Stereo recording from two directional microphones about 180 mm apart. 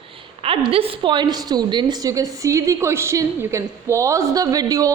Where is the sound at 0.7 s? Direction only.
30° right (ahead or behind).